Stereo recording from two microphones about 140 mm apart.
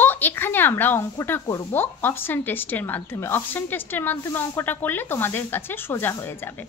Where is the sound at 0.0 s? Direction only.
15° left (ahead or behind).